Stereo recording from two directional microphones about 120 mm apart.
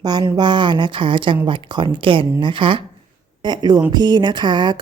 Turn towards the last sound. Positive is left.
turn(degrees=-40)  # may be behind; listen again after turning